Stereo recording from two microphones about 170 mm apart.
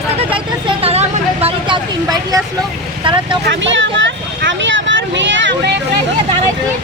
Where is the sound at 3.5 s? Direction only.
90° right.